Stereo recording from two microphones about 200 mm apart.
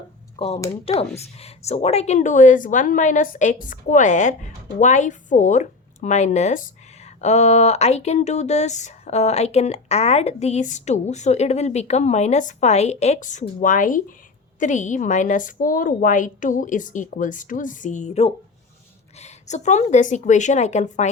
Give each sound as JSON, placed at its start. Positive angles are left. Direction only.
{"t": 0.3, "sound": "speech", "side_deg": 30}